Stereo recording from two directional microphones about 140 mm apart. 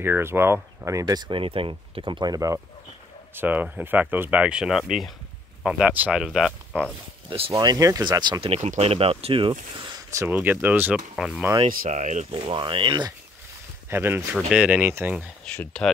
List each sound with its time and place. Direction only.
0.0 s speech: 15° right (ahead or behind)
3.3 s speech: 10° right (ahead or behind)
7.2 s speech: 40° right (ahead or behind)
7.5 s speech: 25° right (ahead or behind)
8.4 s speech: 45° right (ahead or behind)
10.1 s speech: 15° right (ahead or behind)
11.8 s speech: 60° right (ahead or behind)
12.4 s speech: 40° right (ahead or behind)
13.8 s speech: 15° right (ahead or behind)
15.5 s speech: 5° left (ahead or behind)